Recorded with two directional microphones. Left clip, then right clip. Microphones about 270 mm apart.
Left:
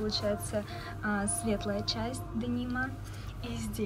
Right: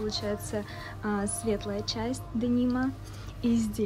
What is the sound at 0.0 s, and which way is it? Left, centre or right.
A woman's voice, centre.